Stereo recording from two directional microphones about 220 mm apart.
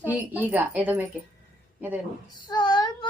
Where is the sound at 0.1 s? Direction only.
10° right (ahead or behind).